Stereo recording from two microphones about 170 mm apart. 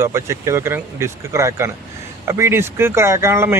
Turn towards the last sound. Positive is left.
turn(degrees=-15)  # may be behind; listen again after turning